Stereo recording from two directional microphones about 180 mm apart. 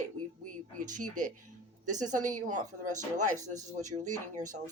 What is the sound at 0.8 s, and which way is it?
Speech, 45° right (ahead or behind).